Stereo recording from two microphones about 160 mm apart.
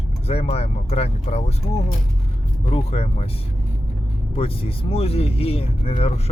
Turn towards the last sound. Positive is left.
turn(degrees=40)  # may be behind; listen again after turning